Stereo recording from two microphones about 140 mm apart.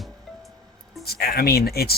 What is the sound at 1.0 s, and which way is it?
Speech, 90° left.